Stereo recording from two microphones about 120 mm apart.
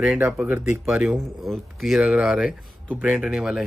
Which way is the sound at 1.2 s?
Centre (ahead or behind).